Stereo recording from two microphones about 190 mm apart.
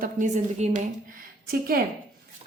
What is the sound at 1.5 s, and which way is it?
Speech, 50° right (ahead or behind).